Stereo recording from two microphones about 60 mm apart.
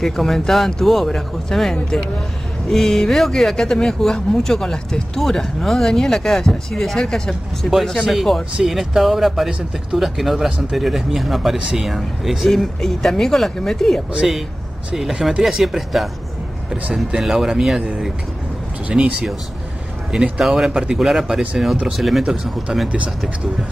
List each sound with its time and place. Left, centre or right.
0.0 s speech: centre
11.5 s speech: centre
11.8 s speech: centre
14.2 s speech: centre
17.2 s speech: centre
18.9 s speech: right; by 22.8 s centre